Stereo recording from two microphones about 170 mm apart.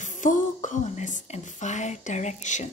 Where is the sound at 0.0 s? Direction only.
50° left (ahead or behind).